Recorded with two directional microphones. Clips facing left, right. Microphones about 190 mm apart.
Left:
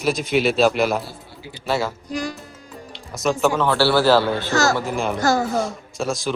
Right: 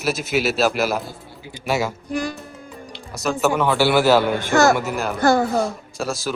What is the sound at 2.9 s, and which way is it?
A man's voice, centre (ahead or behind).